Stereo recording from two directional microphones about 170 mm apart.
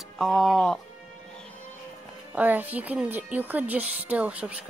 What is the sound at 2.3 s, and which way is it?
Speech, 10° right (ahead or behind).